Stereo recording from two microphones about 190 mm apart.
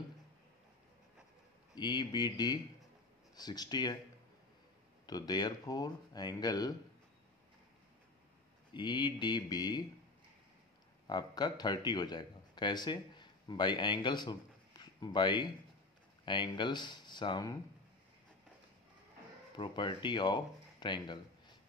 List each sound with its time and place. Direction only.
1.8 s speech: 25° left (ahead or behind)
5.0 s speech: 20° left (ahead or behind)
8.7 s speech: 25° left (ahead or behind)
11.1 s speech: 25° left (ahead or behind)
19.5 s speech: 25° left (ahead or behind)